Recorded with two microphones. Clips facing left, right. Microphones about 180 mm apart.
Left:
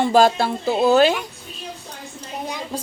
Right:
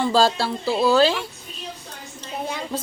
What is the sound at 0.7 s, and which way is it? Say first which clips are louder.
Speech: left 2 dB; 20° left (ahead or behind).